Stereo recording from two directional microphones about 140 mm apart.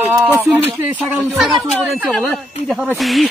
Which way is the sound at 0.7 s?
Centre (ahead or behind).